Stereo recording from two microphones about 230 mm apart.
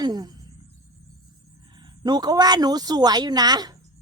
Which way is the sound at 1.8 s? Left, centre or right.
Centre.